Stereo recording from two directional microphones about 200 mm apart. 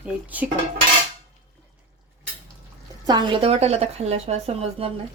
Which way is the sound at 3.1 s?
25° right (ahead or behind).